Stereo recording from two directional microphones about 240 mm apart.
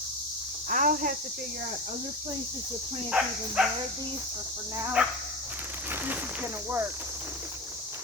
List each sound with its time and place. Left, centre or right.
0.7 s speech: right
3.1 s speech: centre
5.0 s speech: centre